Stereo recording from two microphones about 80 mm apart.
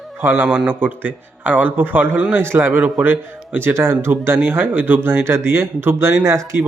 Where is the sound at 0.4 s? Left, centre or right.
Centre; by 6.6 s right.